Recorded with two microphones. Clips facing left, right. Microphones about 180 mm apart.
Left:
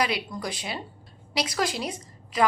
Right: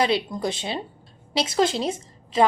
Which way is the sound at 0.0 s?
25° right (ahead or behind).